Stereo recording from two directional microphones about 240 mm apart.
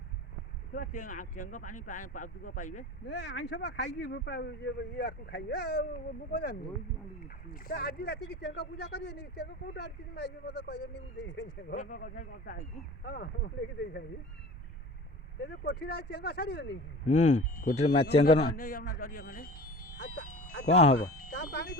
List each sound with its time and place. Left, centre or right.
0.7 s speech: left
3.1 s speech: left
11.7 s speech: left
15.4 s speech: left
17.1 s speech: left
20.7 s speech: left